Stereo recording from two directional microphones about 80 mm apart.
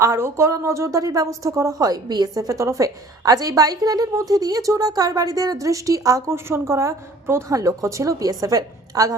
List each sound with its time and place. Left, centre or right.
0.0 s speech: right